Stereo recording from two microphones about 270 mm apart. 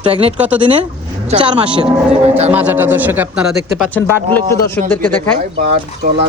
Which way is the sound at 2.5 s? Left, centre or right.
Centre.